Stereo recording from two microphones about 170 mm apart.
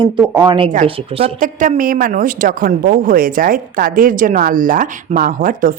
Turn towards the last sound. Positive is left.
turn(degrees=-55)  # may be behind; listen again after turning